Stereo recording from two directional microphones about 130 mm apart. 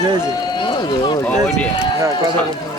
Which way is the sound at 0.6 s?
40° left (ahead or behind).